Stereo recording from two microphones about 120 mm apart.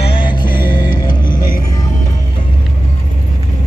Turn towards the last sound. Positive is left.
turn(degrees=35)  # may be behind; listen again after turning